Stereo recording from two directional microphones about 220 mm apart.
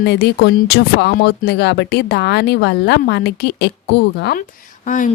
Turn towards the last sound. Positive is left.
turn(degrees=35)  # may be behind; listen again after turning